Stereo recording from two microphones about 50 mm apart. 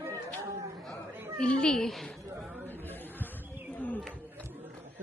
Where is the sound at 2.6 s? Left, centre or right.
Left.